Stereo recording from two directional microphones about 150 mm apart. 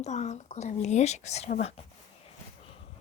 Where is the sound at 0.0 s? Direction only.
50° left (ahead or behind).